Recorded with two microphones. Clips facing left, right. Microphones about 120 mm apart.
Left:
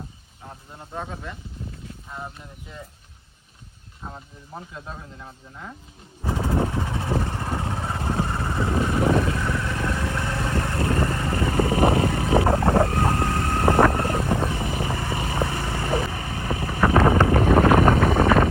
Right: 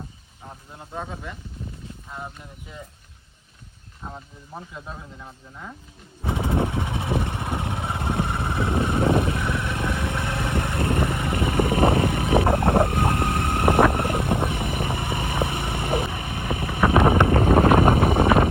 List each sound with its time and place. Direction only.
0.4 s a sound: centre (ahead or behind)
2.0 s speech: centre (ahead or behind)
4.0 s speech: centre (ahead or behind)
6.2 s vehicle: 20° right (ahead or behind)
11.5 s a sound: 60° right (ahead or behind)
12.1 s boat: 25° right (ahead or behind)
14.8 s vehicle: 20° right (ahead or behind)
16.8 s wind noise: 20° right (ahead or behind)